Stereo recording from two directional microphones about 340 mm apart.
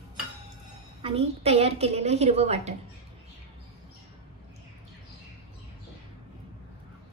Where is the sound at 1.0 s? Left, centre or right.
Centre.